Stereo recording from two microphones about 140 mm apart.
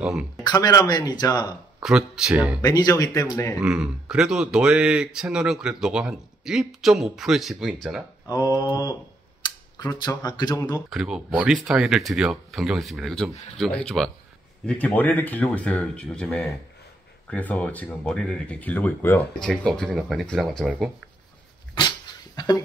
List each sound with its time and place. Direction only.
0.0 s speech: 5° right (ahead or behind)
0.4 s speech: 25° left (ahead or behind)
1.8 s speech: 5° right (ahead or behind)
2.6 s speech: 30° left (ahead or behind)
3.5 s speech: 5° right (ahead or behind)
8.3 s speech: 25° left (ahead or behind)
10.9 s speech: 5° right (ahead or behind)
21.7 s dog: 30° left (ahead or behind)